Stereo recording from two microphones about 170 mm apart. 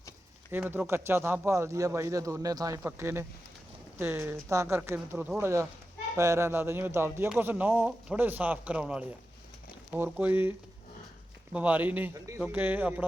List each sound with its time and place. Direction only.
0.5 s speech: 10° right (ahead or behind)
11.5 s speech: 10° right (ahead or behind)